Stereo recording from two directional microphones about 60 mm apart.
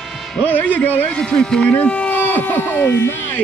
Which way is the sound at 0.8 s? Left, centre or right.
Left.